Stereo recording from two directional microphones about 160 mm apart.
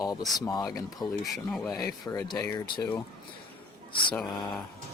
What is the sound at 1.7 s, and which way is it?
Speech, 20° left (ahead or behind).